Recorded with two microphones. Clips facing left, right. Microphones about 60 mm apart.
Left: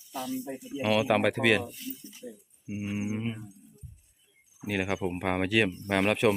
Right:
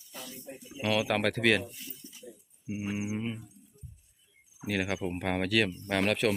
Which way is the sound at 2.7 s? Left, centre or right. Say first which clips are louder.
Left 1 dB; centre.